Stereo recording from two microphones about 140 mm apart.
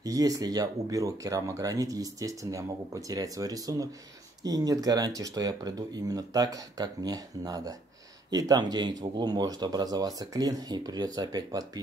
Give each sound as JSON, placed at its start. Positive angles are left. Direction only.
{"t": 0.0, "sound": "speech", "side_deg": -25}